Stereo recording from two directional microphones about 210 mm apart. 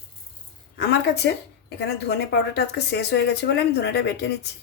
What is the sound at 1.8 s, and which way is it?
A woman's voice, 50° left (ahead or behind).